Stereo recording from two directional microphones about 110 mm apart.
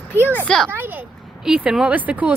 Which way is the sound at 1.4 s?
5° right (ahead or behind).